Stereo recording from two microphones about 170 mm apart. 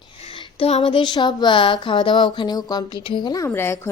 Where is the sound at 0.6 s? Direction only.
35° left (ahead or behind).